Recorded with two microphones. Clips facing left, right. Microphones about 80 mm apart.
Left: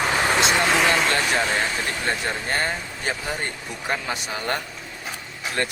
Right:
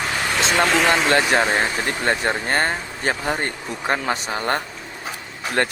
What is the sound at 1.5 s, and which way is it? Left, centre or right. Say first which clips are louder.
Speech: right 3 dB; right.